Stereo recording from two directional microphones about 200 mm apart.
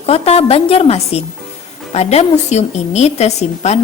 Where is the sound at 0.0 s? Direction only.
30° left (ahead or behind).